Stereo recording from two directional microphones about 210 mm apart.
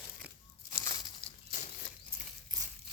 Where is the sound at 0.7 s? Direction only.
15° left (ahead or behind).